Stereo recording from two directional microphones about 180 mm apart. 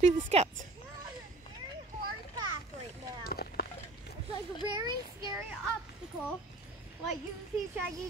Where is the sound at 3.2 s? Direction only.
60° left (ahead or behind).